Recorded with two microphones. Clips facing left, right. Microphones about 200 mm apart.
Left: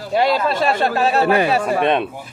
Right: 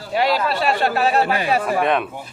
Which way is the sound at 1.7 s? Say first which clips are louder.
Left 2 dB; 25° left (ahead or behind).